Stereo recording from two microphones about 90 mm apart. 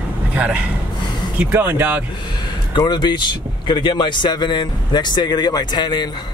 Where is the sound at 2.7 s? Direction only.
50° left (ahead or behind).